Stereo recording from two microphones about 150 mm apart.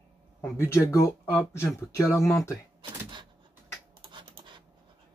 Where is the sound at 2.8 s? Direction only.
30° right (ahead or behind).